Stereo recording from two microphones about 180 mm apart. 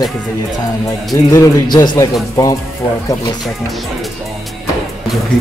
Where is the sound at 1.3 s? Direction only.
20° left (ahead or behind).